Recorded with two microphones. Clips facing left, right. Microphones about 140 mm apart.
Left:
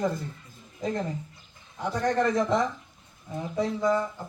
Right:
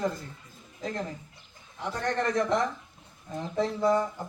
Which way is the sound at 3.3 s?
10° left (ahead or behind).